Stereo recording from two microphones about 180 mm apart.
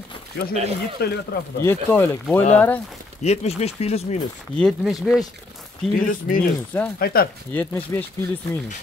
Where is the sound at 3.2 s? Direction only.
35° left (ahead or behind).